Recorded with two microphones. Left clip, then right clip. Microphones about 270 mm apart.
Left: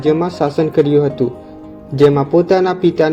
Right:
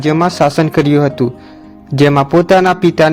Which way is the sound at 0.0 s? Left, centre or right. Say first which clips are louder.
Right 3 dB; right.